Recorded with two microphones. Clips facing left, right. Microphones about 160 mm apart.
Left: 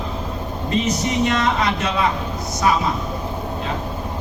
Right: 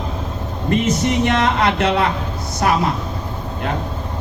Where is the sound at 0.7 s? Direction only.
55° right (ahead or behind).